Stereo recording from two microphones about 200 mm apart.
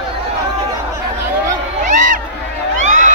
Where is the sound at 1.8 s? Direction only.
40° right (ahead or behind).